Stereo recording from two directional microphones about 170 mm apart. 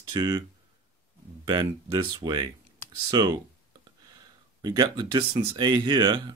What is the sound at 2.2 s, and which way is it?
Speech, 25° right (ahead or behind).